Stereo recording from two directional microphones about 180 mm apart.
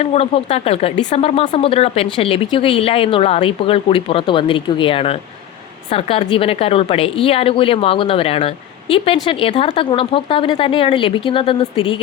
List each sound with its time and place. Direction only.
0.0 s a woman's voice: 35° left (ahead or behind)